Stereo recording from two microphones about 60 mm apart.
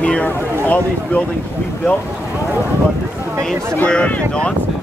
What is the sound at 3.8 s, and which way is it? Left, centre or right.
Speech, left.